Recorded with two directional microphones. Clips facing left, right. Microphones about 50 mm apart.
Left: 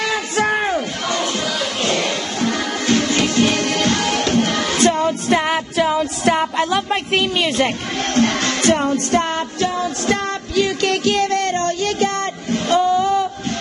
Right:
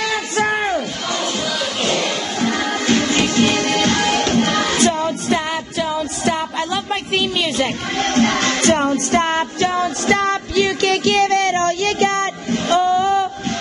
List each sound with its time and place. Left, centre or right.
0.4 s a sound: centre
4.8 s music: left
5.4 s music: left
6.9 s a woman's voice: left
8.7 s music: centre
9.2 s music: right
10.0 s music: right
11.5 s music: right
12.8 s music: right